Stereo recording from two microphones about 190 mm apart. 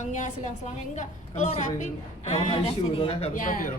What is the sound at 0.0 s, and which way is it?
A woman's voice, 40° left (ahead or behind).